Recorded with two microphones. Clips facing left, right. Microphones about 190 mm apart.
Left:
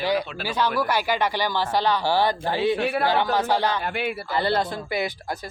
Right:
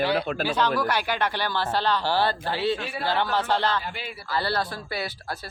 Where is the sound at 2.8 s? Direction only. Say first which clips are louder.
Left 9 dB; 60° left (ahead or behind).